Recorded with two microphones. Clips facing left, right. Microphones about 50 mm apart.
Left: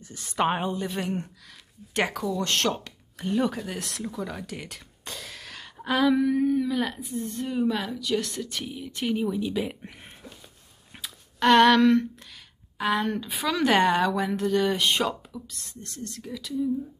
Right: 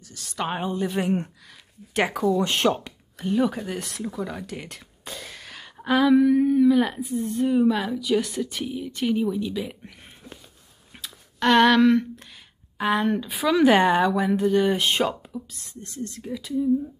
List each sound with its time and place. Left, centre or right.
0.1 s a woman's voice: left
0.6 s speech: centre
3.2 s speech: centre
11.0 s a sound: centre
12.7 s speech: centre